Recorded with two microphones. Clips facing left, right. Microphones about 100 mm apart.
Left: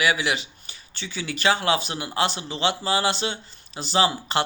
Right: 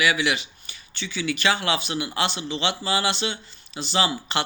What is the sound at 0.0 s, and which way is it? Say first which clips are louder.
A man's voice: even; 35° left (ahead or behind).